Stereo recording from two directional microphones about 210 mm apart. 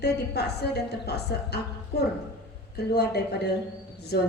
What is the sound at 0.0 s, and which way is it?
A woman's voice, 50° left (ahead or behind).